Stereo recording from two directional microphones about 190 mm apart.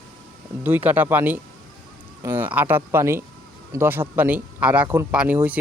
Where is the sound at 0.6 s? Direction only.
10° right (ahead or behind).